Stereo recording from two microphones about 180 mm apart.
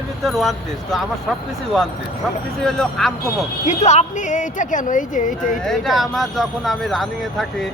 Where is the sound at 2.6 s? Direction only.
Centre (ahead or behind).